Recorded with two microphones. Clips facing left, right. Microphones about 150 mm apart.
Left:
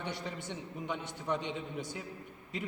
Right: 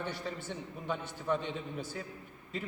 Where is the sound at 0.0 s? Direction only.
20° left (ahead or behind).